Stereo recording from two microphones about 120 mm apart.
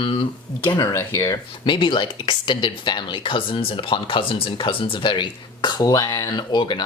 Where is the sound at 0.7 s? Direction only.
25° left (ahead or behind).